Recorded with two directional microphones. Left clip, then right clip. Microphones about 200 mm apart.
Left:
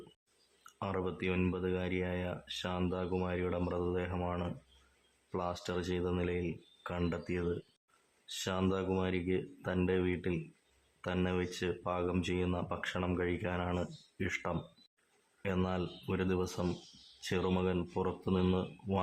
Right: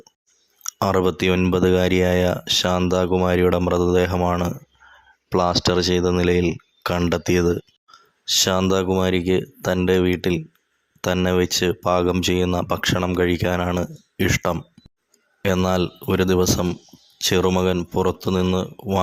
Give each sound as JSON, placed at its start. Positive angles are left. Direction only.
{"t": 0.8, "sound": "speech", "side_deg": -45}